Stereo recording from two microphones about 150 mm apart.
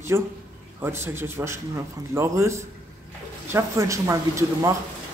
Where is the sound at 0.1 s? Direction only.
15° right (ahead or behind).